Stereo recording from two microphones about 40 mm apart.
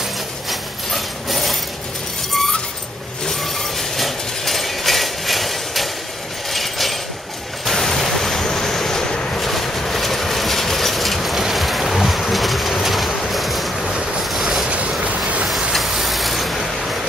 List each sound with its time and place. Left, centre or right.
0.5 s a sound: centre
3.3 s a sound: centre
7.6 s waves: centre
9.4 s vehicle: centre
11.5 s boat: centre
12.7 s a sound: centre
14.3 s boat: centre
15.0 s train: right
15.7 s vehicle: centre